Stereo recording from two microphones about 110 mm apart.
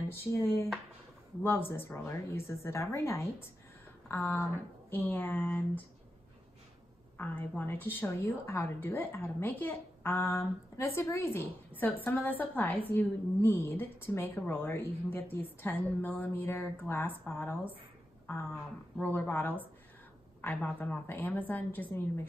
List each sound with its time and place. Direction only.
0.1 s a woman's voice: 20° left (ahead or behind)
1.7 s a woman's voice: 20° left (ahead or behind)
7.2 s a woman's voice: 15° left (ahead or behind)